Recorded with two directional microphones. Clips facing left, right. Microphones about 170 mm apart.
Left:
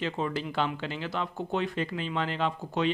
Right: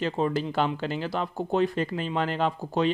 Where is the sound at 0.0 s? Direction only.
40° right (ahead or behind).